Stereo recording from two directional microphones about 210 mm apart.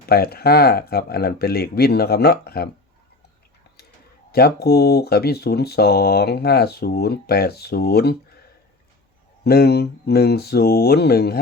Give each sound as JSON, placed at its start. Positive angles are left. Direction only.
{"t": 0.0, "sound": "speech", "side_deg": 45}
{"t": 4.3, "sound": "speech", "side_deg": 50}
{"t": 9.4, "sound": "speech", "side_deg": 50}